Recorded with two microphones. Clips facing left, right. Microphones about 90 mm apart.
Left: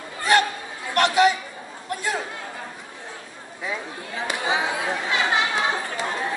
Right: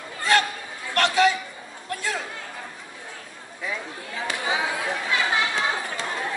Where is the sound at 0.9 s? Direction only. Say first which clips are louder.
Left 2 dB; 20° left (ahead or behind).